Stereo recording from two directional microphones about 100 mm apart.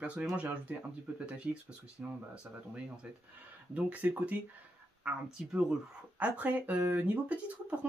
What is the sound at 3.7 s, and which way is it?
Speech, 15° right (ahead or behind).